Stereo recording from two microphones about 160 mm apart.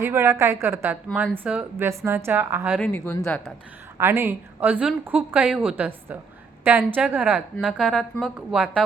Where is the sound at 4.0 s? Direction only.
15° right (ahead or behind).